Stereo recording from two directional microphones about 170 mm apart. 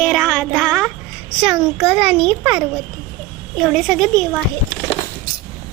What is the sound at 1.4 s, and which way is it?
A child's voice, 10° right (ahead or behind).